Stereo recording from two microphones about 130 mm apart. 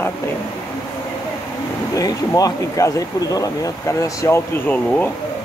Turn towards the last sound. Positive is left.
turn(degrees=15)  # may be behind; listen again after turning